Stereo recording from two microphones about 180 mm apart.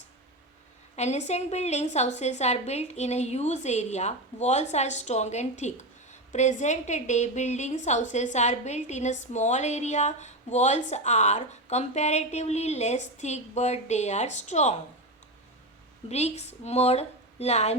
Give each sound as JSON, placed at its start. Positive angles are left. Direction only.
{"t": 0.9, "sound": "a woman's voice", "side_deg": 40}
{"t": 16.0, "sound": "a woman's voice", "side_deg": 40}